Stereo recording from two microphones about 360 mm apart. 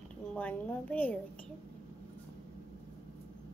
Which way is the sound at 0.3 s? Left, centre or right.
Centre.